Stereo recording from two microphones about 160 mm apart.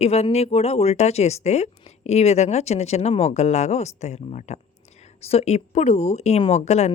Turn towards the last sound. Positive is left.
turn(degrees=45)  # may be behind; listen again after turning